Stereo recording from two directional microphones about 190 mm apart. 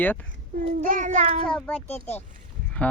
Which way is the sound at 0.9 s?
40° right (ahead or behind).